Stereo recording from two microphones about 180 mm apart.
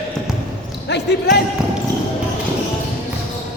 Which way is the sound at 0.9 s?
65° left (ahead or behind).